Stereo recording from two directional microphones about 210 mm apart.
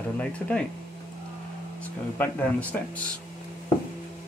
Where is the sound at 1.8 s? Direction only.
10° left (ahead or behind).